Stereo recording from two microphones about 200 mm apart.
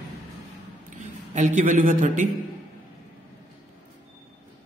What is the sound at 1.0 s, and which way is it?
A man's voice, 40° right (ahead or behind).